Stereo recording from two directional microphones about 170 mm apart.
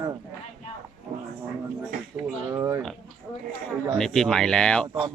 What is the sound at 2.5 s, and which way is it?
Speech, 20° right (ahead or behind).